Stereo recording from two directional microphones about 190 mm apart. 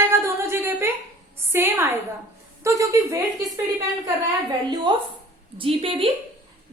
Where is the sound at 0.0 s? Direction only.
15° right (ahead or behind).